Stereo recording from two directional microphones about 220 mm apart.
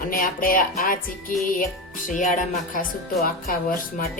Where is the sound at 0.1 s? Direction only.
40° left (ahead or behind).